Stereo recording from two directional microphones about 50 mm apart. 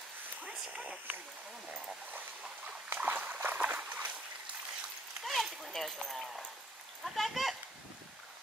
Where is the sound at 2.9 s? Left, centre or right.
Right.